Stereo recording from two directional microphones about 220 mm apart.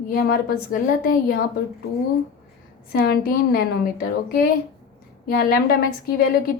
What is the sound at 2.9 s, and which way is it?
A woman's voice, 45° left (ahead or behind).